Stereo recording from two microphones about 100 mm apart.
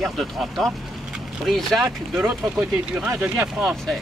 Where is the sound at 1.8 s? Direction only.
25° right (ahead or behind).